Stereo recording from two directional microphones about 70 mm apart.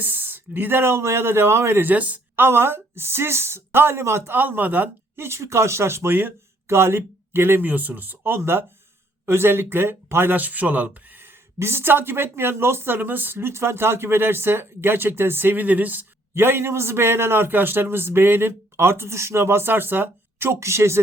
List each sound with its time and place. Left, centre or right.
0.0 s speech: right
5.2 s speech: right
16.3 s speech: right